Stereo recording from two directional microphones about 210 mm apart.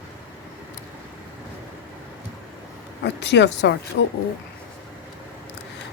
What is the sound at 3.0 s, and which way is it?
A woman's voice, 55° left (ahead or behind).